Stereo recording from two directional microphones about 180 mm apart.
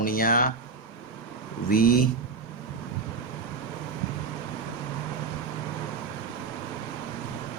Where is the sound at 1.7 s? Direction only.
55° left (ahead or behind).